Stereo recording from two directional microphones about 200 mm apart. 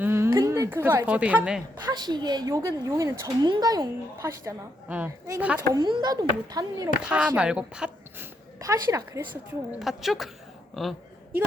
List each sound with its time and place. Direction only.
0.0 s a woman's voice: 10° right (ahead or behind)
1.9 s a woman's voice: 20° right (ahead or behind)
5.7 s a child's voice: 20° right (ahead or behind)
7.0 s speech: 5° right (ahead or behind)
8.5 s a woman's voice: 15° right (ahead or behind)
9.7 s speech: centre (ahead or behind)